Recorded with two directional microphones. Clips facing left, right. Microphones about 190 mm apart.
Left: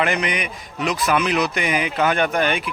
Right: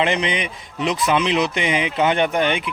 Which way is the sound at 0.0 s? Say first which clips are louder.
Right 1 dB; 25° right (ahead or behind).